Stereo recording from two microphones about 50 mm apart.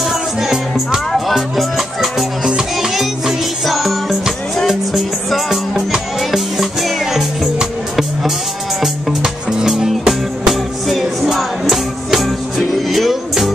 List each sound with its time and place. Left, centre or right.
0.1 s music: centre
2.4 s music: centre
2.9 s music: centre
8.8 s music: centre